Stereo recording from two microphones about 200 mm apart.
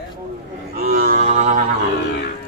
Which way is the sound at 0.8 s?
50° right (ahead or behind).